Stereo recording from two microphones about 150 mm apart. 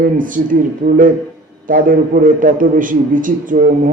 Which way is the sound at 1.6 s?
65° right (ahead or behind).